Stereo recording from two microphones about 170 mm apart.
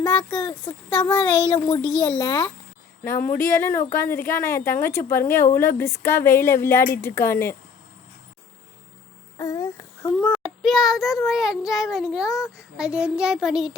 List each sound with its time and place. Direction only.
0.0 s a woman's voice: 10° left (ahead or behind)
1.1 s a child's voice: 30° left (ahead or behind)
3.2 s a woman's voice: 15° left (ahead or behind)
9.4 s a sound: 20° left (ahead or behind)
10.2 s child singing: 5° left (ahead or behind)